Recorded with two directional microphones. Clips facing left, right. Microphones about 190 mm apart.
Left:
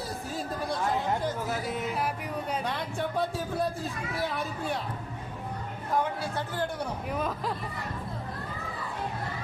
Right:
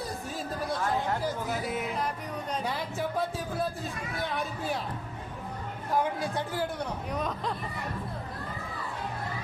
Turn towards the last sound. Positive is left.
turn(degrees=5)  # may be behind; listen again after turning